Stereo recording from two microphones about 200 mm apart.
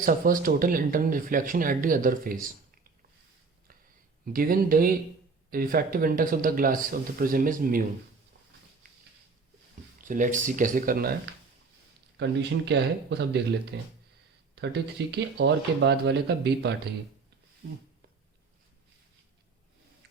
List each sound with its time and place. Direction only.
0.0 s speech: 45° right (ahead or behind)
4.3 s speech: 45° right (ahead or behind)
10.0 s speech: 40° right (ahead or behind)
12.1 s speech: 60° right (ahead or behind)